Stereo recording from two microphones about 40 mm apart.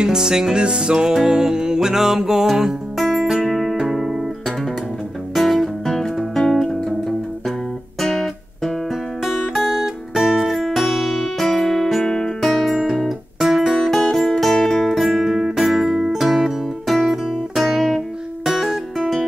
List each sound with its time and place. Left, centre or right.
0.0 s music: centre
3.0 s music: centre
8.0 s music: centre
9.2 s music: centre
12.4 s music: centre
18.5 s music: centre